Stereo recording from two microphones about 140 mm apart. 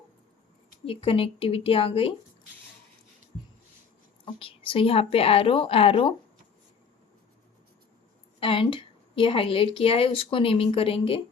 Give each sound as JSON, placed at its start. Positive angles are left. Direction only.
{"t": 0.9, "sound": "a woman's voice", "side_deg": 40}
{"t": 4.4, "sound": "a woman's voice", "side_deg": 40}
{"t": 8.4, "sound": "a woman's voice", "side_deg": 40}